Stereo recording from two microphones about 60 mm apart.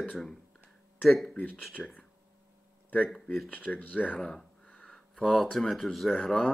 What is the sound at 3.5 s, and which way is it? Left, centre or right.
Speech, left.